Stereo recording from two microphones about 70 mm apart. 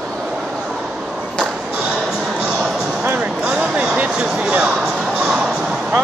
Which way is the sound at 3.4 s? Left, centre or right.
Centre.